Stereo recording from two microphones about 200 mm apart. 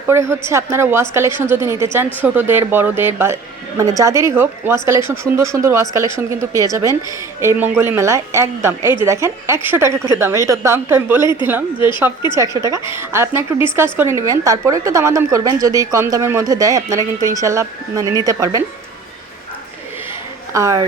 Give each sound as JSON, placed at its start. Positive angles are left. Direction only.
{"t": 0.1, "sound": "a woman's voice", "side_deg": -10}
{"t": 11.2, "sound": "a woman's voice", "side_deg": 20}
{"t": 11.4, "sound": "a woman's voice", "side_deg": -10}
{"t": 20.5, "sound": "a woman's voice", "side_deg": -15}